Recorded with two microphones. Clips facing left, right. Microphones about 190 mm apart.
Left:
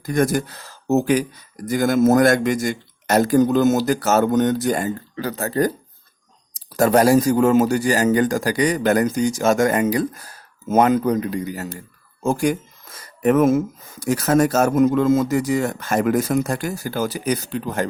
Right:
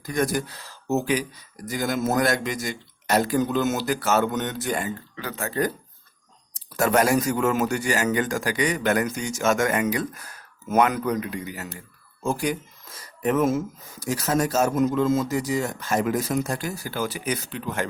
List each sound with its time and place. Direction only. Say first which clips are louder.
0.0 s speech: left 5 dB; 50° left (ahead or behind)